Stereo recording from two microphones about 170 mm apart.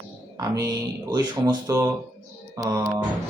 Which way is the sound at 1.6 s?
20° right (ahead or behind).